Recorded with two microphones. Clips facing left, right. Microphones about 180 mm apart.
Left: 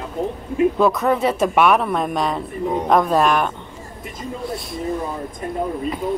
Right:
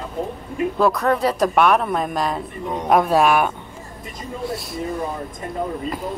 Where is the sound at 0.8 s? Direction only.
5° left (ahead or behind).